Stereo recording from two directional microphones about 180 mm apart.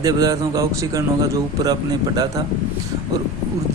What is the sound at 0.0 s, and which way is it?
A man's voice, 20° right (ahead or behind).